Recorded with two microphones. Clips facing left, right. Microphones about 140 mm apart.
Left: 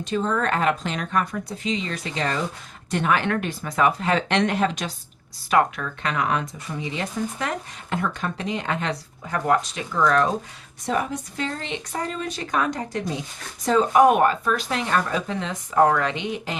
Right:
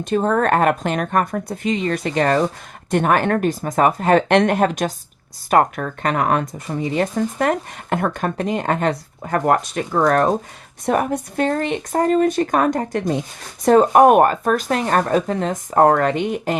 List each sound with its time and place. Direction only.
0.0 s speech: 55° right (ahead or behind)